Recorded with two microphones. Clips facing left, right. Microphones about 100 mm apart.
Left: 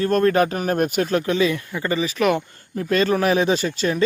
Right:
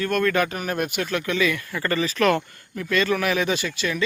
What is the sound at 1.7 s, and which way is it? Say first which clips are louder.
Speech: left 1 dB; 15° left (ahead or behind).